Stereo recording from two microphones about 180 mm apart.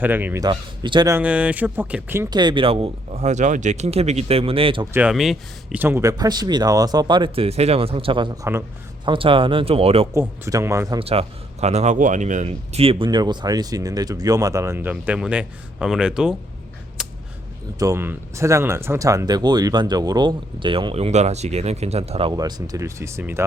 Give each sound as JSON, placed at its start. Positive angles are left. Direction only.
{"t": 0.0, "sound": "speech", "side_deg": -10}
{"t": 0.4, "sound": "speech", "side_deg": -25}
{"t": 1.1, "sound": "speech", "side_deg": -5}
{"t": 2.4, "sound": "speech", "side_deg": -25}
{"t": 4.9, "sound": "speech", "side_deg": -5}
{"t": 9.0, "sound": "speech", "side_deg": -30}
{"t": 10.2, "sound": "speech", "side_deg": -15}
{"t": 11.0, "sound": "speech", "side_deg": -35}
{"t": 17.0, "sound": "a sound", "side_deg": -5}
{"t": 17.7, "sound": "speech", "side_deg": -15}
{"t": 22.3, "sound": "speech", "side_deg": -20}